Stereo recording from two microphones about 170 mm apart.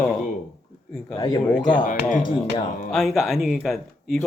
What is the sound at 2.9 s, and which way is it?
Speech, centre (ahead or behind).